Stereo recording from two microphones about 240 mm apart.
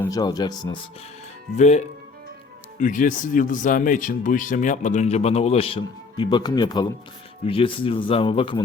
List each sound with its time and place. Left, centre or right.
0.0 s speech: centre
1.5 s speech: left